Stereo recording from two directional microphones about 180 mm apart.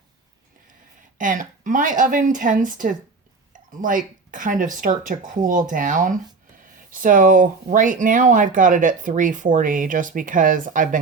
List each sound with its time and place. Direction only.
1.2 s speech: 45° right (ahead or behind)